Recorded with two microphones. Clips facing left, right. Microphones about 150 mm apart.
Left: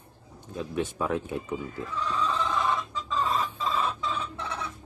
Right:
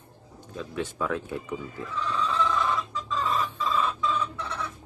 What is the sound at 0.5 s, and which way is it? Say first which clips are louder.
Speech: left 2 dB; 20° left (ahead or behind).